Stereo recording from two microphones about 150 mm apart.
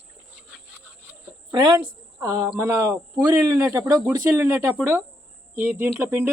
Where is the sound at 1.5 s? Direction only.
30° right (ahead or behind).